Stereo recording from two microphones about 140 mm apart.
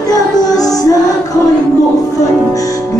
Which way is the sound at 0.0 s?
25° left (ahead or behind).